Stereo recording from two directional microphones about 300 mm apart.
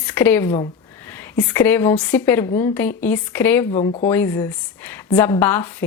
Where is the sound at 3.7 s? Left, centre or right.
Left.